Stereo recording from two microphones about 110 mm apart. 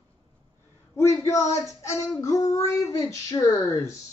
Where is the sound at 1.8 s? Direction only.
30° left (ahead or behind).